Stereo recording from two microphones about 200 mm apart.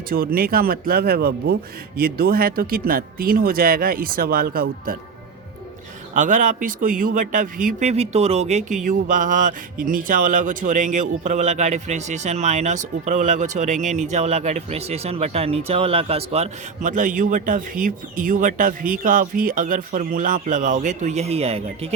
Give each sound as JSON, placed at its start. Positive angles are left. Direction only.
{"t": 0.1, "sound": "speech", "side_deg": -45}
{"t": 6.1, "sound": "speech", "side_deg": -40}